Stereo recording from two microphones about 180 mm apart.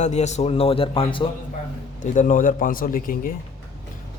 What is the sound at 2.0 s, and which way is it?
A man's voice, 45° left (ahead or behind).